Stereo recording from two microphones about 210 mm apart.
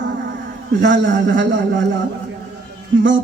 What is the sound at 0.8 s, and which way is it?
A man's voice, 55° right (ahead or behind).